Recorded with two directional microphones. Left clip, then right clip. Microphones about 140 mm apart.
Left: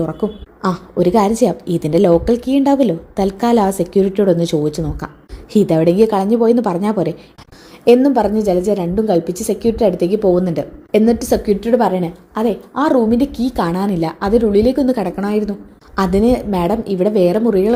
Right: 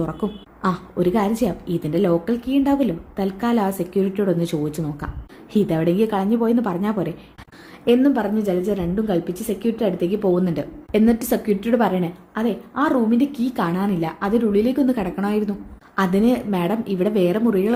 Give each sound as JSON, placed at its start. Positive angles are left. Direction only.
{"t": 0.0, "sound": "a woman's voice", "side_deg": 10}